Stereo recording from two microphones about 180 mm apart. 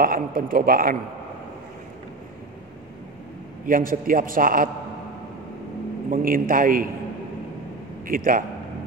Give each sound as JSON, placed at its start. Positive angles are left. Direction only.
{"t": 0.0, "sound": "a man's voice", "side_deg": -50}
{"t": 3.6, "sound": "a man's voice", "side_deg": -50}
{"t": 6.1, "sound": "a man's voice", "side_deg": -50}
{"t": 8.1, "sound": "a man's voice", "side_deg": -50}